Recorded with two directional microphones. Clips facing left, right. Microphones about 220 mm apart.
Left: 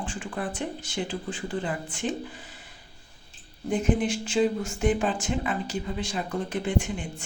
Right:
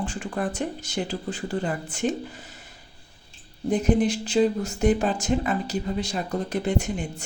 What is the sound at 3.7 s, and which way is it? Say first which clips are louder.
Speech: right 3 dB; 40° right (ahead or behind).